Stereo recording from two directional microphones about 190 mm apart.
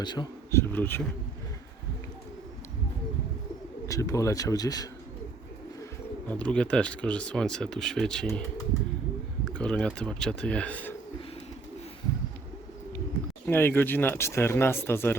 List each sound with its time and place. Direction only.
0.0 s speech: 20° left (ahead or behind)
0.7 s speech: 10° left (ahead or behind)
3.8 s speech: 15° left (ahead or behind)
6.2 s speech: 5° left (ahead or behind)
9.4 s speech: 5° left (ahead or behind)
13.5 s speech: 10° left (ahead or behind)